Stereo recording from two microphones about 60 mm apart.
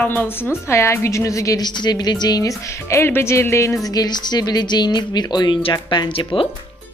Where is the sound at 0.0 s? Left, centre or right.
Left.